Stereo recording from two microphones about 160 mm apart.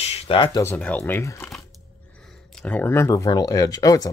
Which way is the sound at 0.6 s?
10° left (ahead or behind).